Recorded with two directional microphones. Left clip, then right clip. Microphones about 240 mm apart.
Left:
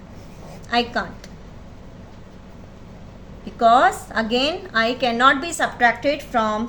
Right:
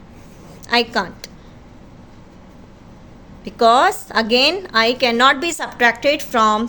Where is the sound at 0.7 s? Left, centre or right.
Right.